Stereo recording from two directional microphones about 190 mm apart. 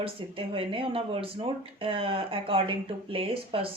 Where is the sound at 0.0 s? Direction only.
30° right (ahead or behind).